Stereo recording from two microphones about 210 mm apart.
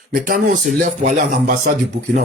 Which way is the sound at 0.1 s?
40° right (ahead or behind).